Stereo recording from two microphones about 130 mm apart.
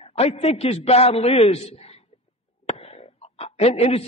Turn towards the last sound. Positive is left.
turn(degrees=50)  # may be behind; listen again after turning